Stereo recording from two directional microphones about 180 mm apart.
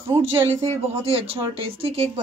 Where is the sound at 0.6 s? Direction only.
35° right (ahead or behind).